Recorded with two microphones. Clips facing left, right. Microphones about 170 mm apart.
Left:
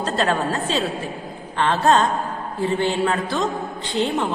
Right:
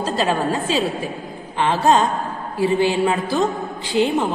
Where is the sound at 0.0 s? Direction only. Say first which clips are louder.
Right 1 dB; 10° right (ahead or behind).